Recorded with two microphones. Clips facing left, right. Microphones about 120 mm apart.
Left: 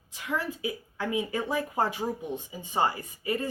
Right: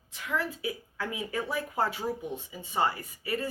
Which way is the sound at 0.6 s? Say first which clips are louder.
Left 2 dB; 20° left (ahead or behind).